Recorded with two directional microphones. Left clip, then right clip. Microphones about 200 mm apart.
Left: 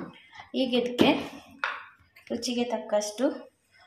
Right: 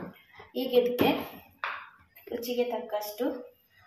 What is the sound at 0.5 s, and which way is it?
Speech, 40° left (ahead or behind).